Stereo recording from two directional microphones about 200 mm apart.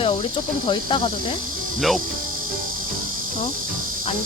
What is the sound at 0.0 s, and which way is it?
Cricket, 25° left (ahead or behind).